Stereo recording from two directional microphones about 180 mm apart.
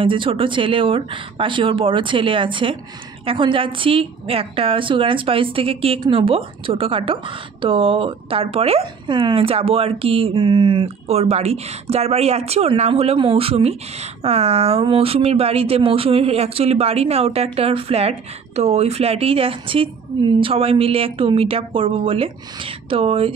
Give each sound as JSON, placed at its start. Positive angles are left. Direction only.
{"t": 0.0, "sound": "a woman's voice", "side_deg": -30}